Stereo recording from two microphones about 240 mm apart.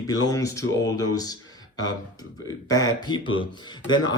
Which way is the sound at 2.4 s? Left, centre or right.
Centre.